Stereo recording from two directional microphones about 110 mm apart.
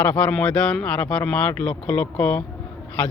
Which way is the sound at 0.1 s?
10° left (ahead or behind).